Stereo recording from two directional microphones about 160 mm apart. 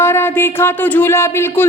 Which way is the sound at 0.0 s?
15° left (ahead or behind).